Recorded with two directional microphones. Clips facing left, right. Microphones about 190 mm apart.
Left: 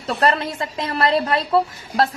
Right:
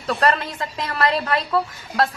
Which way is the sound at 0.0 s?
25° left (ahead or behind).